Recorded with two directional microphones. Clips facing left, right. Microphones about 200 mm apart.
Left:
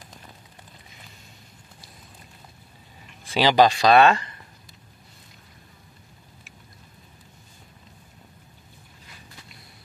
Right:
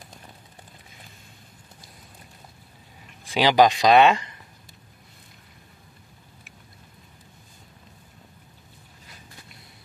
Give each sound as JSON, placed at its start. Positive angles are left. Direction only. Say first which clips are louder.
{"t": 3.3, "sound": "speech", "louder": "even", "side_deg": -15}